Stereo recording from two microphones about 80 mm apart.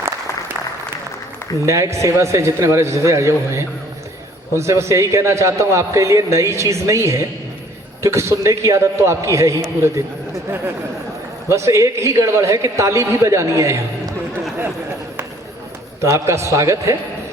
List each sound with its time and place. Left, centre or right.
1.6 s a man's voice: right
11.5 s a man's voice: right
16.0 s a man's voice: right